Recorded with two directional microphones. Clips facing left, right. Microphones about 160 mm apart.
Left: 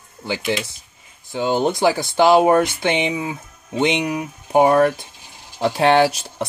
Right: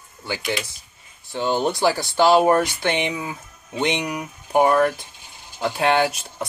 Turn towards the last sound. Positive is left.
turn(degrees=30)  # may be behind; listen again after turning